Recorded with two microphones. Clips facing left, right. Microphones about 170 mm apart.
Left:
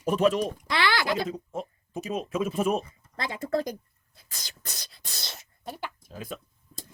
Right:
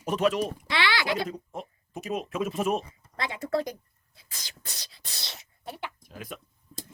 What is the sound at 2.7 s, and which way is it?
Speech, 35° left (ahead or behind).